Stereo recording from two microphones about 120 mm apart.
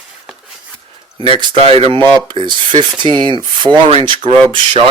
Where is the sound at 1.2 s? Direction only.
45° right (ahead or behind).